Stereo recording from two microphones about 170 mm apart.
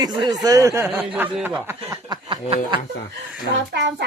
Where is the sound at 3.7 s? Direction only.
85° right.